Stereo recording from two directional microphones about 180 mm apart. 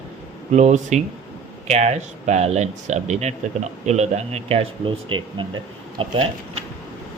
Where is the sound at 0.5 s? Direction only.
40° right (ahead or behind).